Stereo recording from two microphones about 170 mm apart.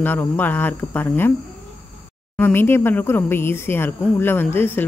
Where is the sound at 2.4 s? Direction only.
10° left (ahead or behind).